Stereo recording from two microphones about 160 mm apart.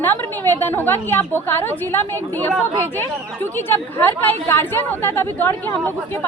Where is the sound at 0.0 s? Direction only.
15° left (ahead or behind).